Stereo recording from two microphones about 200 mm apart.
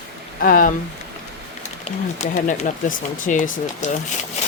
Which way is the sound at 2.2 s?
35° left (ahead or behind).